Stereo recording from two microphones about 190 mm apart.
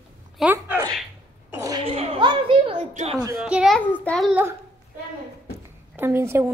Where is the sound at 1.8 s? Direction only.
30° right (ahead or behind).